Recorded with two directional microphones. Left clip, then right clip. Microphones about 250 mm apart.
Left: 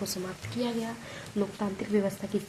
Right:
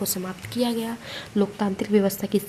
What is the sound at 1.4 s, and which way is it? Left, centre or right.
Speech, right.